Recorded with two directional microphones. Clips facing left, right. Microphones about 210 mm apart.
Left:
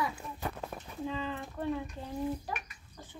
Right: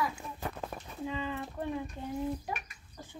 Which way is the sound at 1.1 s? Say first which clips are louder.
Right 2 dB; 15° right (ahead or behind).